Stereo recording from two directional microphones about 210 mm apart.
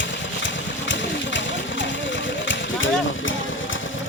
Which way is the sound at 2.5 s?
65° left (ahead or behind).